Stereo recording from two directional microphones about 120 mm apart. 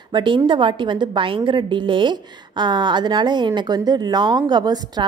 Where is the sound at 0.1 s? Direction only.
40° right (ahead or behind).